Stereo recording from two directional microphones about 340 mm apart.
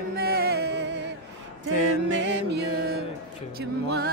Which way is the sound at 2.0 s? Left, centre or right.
Right.